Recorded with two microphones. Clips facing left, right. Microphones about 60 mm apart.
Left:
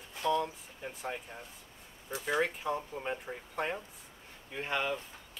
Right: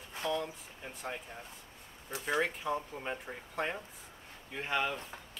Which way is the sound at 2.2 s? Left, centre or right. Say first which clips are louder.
Left 1 dB; centre.